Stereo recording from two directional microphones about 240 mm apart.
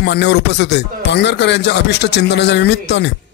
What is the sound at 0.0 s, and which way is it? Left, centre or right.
Speech, left.